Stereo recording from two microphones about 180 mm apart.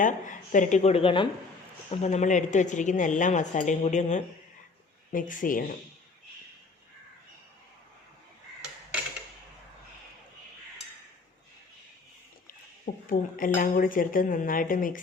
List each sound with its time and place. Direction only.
0.0 s a woman's voice: 45° left (ahead or behind)
12.8 s a woman's voice: 50° left (ahead or behind)